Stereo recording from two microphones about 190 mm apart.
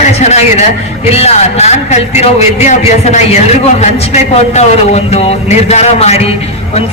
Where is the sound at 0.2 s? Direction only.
35° left (ahead or behind).